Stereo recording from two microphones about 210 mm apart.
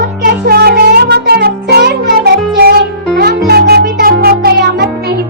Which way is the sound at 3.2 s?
50° right (ahead or behind).